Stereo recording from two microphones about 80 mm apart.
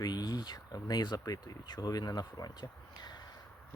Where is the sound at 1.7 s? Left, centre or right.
Left.